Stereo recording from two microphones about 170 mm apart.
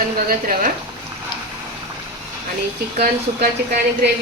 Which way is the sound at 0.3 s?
55° right (ahead or behind).